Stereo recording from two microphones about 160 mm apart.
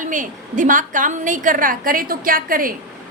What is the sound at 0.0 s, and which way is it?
A woman's voice, 55° right (ahead or behind).